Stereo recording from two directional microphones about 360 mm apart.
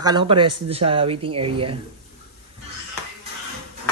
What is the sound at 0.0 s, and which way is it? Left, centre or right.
Speech, centre.